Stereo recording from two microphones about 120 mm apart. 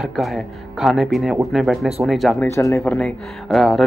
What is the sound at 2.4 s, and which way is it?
Speech, 25° left (ahead or behind).